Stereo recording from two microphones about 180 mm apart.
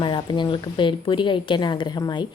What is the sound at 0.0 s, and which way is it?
A woman's voice, 25° left (ahead or behind).